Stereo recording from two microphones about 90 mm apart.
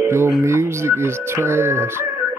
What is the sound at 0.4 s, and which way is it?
Speech, 30° right (ahead or behind).